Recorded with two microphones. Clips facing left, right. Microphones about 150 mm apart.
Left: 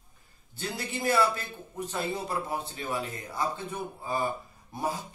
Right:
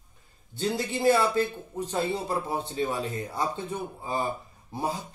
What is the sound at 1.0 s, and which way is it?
A man's voice, 25° right (ahead or behind).